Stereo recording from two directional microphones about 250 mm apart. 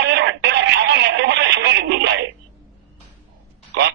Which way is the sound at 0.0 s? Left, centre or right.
Right.